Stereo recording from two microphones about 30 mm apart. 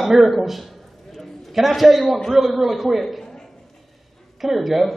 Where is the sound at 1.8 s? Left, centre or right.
Centre.